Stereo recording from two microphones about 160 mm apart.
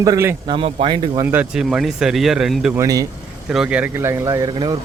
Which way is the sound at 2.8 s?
20° right (ahead or behind).